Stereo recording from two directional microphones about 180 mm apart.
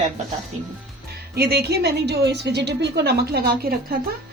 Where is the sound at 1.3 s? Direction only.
60° right (ahead or behind).